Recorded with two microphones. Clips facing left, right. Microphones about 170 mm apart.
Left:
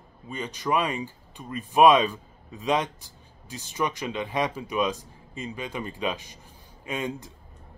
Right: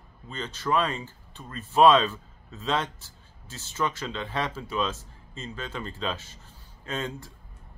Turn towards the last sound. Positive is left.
turn(degrees=15)  # may be behind; listen again after turning